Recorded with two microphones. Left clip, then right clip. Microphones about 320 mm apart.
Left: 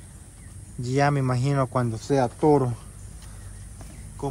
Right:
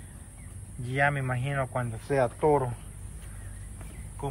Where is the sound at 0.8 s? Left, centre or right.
Centre.